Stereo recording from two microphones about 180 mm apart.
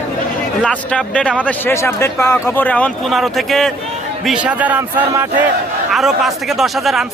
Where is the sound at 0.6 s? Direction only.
5° left (ahead or behind).